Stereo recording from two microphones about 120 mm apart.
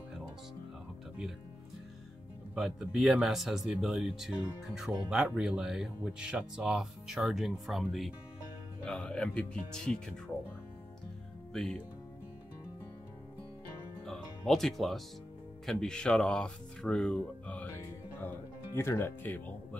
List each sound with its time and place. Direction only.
2.5 s speech: 5° right (ahead or behind)
11.5 s speech: 5° left (ahead or behind)
14.0 s speech: 5° left (ahead or behind)